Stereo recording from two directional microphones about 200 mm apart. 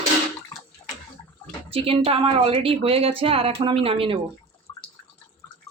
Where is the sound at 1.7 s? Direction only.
30° right (ahead or behind).